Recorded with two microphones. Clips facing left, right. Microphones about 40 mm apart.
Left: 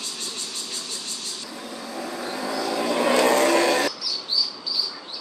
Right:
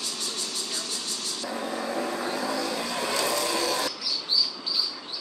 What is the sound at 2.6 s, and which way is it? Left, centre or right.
Vehicle, left.